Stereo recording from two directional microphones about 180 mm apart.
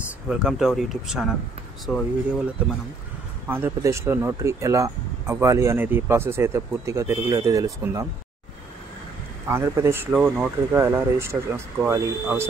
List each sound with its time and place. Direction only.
0.3 s speech: 5° right (ahead or behind)
3.4 s speech: 10° right (ahead or behind)
9.5 s speech: 15° right (ahead or behind)